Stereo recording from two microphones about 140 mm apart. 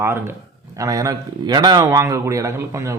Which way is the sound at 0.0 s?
15° right (ahead or behind).